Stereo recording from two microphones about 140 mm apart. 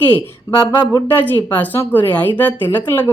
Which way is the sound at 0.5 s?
30° left (ahead or behind).